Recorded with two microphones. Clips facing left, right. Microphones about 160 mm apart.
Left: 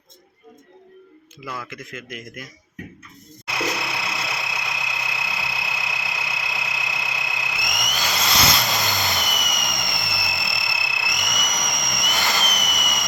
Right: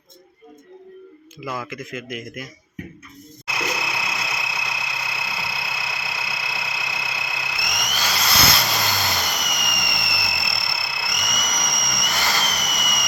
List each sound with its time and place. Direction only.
1.5 s a man's voice: 10° right (ahead or behind)
4.4 s vehicle: 20° left (ahead or behind)
11.3 s jet engine: 20° left (ahead or behind)